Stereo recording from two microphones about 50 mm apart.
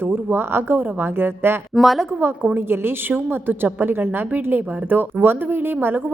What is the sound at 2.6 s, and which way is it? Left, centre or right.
A woman's voice, right.